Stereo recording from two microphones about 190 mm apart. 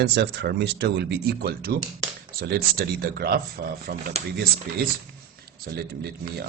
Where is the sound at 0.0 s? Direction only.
60° right (ahead or behind).